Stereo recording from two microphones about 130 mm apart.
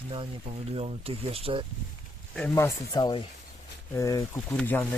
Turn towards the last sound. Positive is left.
turn(degrees=15)  # may be behind; listen again after turning